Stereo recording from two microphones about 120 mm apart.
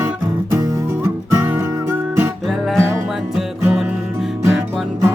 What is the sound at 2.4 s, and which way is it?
Music, centre (ahead or behind).